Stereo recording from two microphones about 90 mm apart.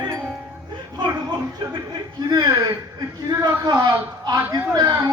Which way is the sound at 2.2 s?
45° right (ahead or behind).